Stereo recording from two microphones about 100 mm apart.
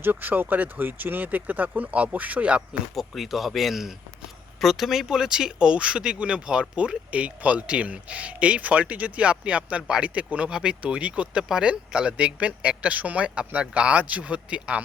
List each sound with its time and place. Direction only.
0.0 s speech: 20° right (ahead or behind)
2.9 s speech: centre (ahead or behind)